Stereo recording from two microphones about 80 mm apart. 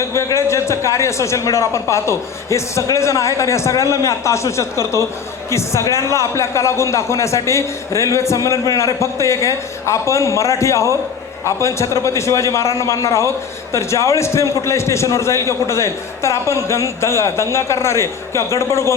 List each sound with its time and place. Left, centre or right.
0.0 s a man's voice: left